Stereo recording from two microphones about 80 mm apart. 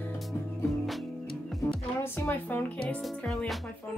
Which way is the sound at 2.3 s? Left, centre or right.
Left.